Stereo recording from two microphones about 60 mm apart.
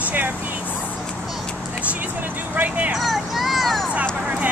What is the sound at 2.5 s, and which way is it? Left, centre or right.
Speech, right.